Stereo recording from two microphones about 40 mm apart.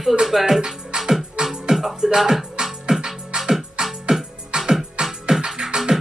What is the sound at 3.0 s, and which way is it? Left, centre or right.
Music, centre.